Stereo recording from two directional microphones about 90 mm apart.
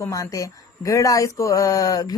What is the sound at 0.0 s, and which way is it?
A woman's voice, 35° left (ahead or behind).